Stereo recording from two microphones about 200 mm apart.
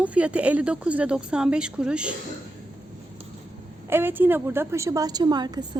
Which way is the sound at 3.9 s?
10° right (ahead or behind).